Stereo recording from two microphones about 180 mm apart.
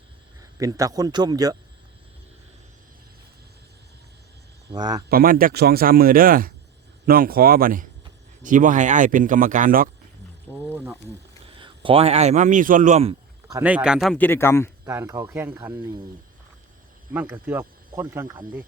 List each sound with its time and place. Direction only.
0.6 s speech: 20° right (ahead or behind)
4.7 s speech: 20° right (ahead or behind)
5.0 s speech: 55° right (ahead or behind)
10.7 s wild animals: 10° right (ahead or behind)
11.4 s a man's voice: 30° right (ahead or behind)
13.6 s speech: 5° right (ahead or behind); by 14.7 s 15° left (ahead or behind)
14.8 s speech: 15° right (ahead or behind)
17.2 s speech: 10° right (ahead or behind)